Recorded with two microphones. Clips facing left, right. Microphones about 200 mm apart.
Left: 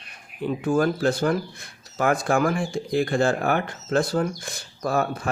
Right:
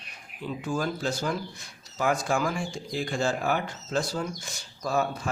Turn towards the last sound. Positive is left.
turn(degrees=55)  # may be behind; listen again after turning